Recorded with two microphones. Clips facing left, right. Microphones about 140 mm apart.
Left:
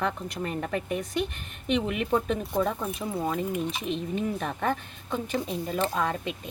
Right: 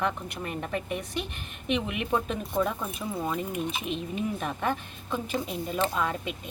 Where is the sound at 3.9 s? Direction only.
5° right (ahead or behind).